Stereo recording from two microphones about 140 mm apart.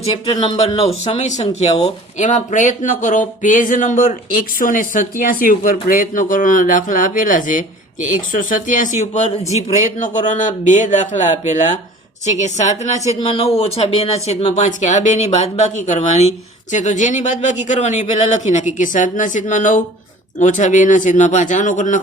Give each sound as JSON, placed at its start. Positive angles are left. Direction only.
{"t": 0.3, "sound": "speech", "side_deg": 40}
{"t": 1.0, "sound": "speech", "side_deg": 55}
{"t": 13.1, "sound": "speech", "side_deg": 45}